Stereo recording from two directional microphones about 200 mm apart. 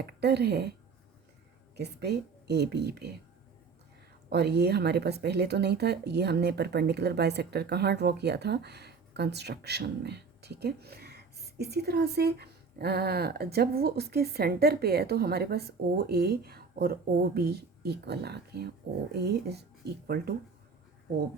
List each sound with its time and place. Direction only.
0.0 s speech: 55° right (ahead or behind)
4.3 s speech: 55° right (ahead or behind)